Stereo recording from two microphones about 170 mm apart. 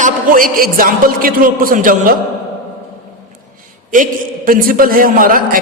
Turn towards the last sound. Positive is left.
turn(degrees=-55)  # may be behind; listen again after turning